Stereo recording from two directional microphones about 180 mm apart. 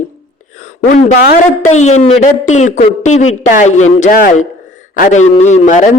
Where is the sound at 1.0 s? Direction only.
45° left (ahead or behind).